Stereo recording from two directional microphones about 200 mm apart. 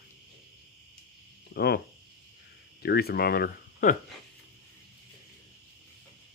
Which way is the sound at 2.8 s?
55° left (ahead or behind).